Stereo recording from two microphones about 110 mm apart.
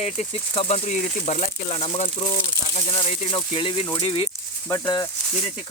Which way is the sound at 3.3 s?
55° left (ahead or behind).